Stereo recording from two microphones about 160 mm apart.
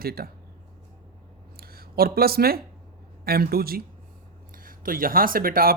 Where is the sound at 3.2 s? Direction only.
70° right (ahead or behind).